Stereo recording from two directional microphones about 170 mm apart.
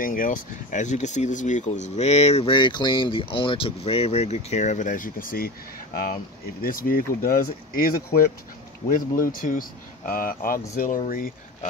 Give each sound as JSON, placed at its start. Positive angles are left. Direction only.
{"t": 0.0, "sound": "speech", "side_deg": 55}
{"t": 6.6, "sound": "speech", "side_deg": 55}